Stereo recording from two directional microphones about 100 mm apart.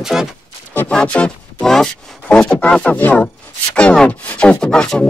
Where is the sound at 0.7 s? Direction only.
10° left (ahead or behind).